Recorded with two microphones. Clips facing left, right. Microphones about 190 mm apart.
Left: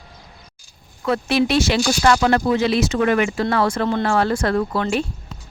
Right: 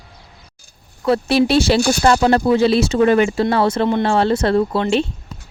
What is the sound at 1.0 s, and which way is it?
Speech, 30° right (ahead or behind).